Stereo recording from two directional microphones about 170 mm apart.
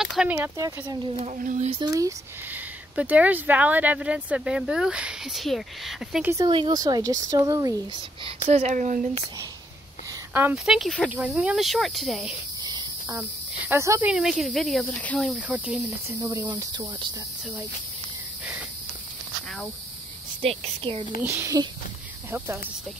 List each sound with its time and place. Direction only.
0.0 s speech: 5° right (ahead or behind)
0.6 s speech: 20° right (ahead or behind)
1.2 s speech: 45° right (ahead or behind)
1.7 s speech: 25° right (ahead or behind); by 6.3 s centre (ahead or behind)
6.3 s speech: 25° right (ahead or behind)
8.5 s speech: 40° right (ahead or behind)
10.3 s speech: 10° right (ahead or behind)
12.6 s cricket: 25° right (ahead or behind)
13.7 s speech: 15° right (ahead or behind)
14.1 s speech: centre (ahead or behind)
15.3 s speech: 5° right (ahead or behind)
16.4 s speech: 25° right (ahead or behind)
20.4 s speech: 35° right (ahead or behind)
21.2 s speech: 15° right (ahead or behind)